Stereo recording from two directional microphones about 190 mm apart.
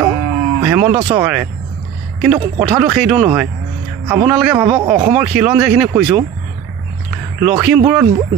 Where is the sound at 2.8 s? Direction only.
5° right (ahead or behind).